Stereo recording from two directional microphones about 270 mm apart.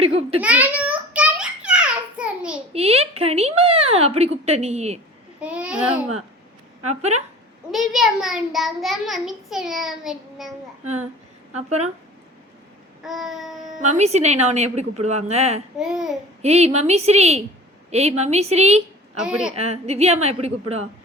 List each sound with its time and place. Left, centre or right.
0.0 s a child's voice: right
0.4 s a sound: centre
2.7 s speech: right
5.4 s a child's voice: centre
6.8 s speech: right
7.7 s a child's voice: centre
11.5 s speech: right
13.0 s a child's voice: centre
13.7 s speech: right
15.8 s a child's voice: centre
16.4 s speech: right
19.1 s a child's voice: centre
19.5 s speech: right